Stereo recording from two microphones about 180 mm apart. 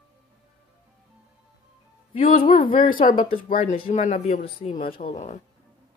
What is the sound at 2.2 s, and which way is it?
Speech, 50° left (ahead or behind).